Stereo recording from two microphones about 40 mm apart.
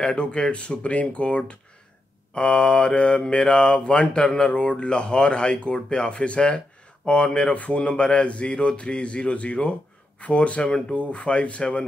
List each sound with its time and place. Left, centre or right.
0.0 s mantra: left
11.0 s speech: left